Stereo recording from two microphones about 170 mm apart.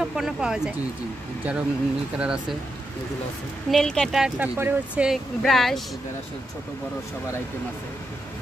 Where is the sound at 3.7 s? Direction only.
5° left (ahead or behind).